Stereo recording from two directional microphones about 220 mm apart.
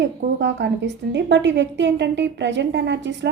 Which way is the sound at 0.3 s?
55° right (ahead or behind).